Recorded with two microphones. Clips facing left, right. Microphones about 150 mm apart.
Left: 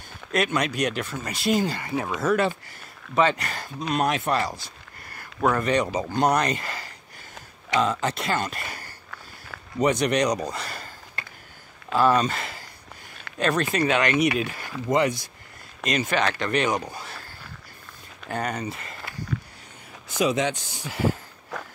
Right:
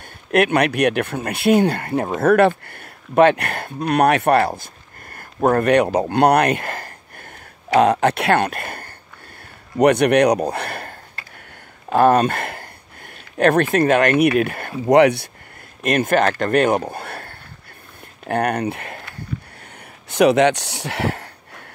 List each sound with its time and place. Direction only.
0.3 s speech: 65° right (ahead or behind)
7.7 s speech: 65° right (ahead or behind)
15.8 s speech: 55° right (ahead or behind)
20.1 s speech: 65° right (ahead or behind)